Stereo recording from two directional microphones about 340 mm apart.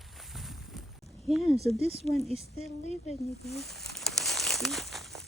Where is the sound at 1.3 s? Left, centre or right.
Centre.